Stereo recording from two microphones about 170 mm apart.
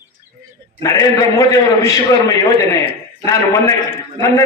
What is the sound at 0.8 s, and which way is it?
A man's voice, 20° left (ahead or behind).